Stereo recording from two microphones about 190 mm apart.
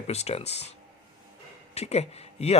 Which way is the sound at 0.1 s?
35° left (ahead or behind).